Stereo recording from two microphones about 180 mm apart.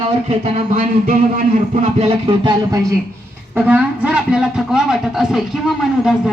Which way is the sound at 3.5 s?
10° right (ahead or behind).